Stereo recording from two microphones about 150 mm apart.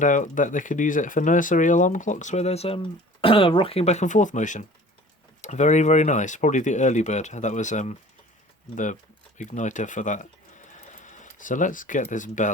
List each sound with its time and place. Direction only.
0.0 s speech: 60° left (ahead or behind)
9.4 s a sound: 55° left (ahead or behind)
12.1 s speech: 55° left (ahead or behind)